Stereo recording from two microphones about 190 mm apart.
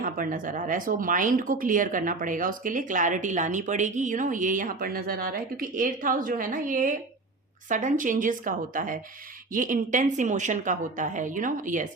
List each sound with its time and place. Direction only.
0.0 s speech: 45° right (ahead or behind)